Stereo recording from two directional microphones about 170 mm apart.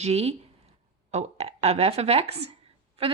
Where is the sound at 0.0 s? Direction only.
40° right (ahead or behind).